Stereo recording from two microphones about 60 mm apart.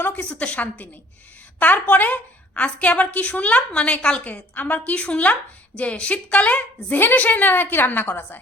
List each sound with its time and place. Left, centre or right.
0.3 s a woman's voice: left